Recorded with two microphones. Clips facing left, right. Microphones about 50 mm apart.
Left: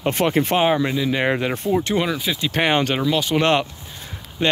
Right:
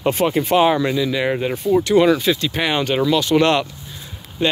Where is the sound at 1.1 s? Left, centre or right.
Left.